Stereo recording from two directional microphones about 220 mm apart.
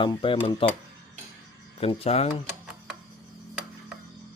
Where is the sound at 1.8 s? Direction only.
25° left (ahead or behind).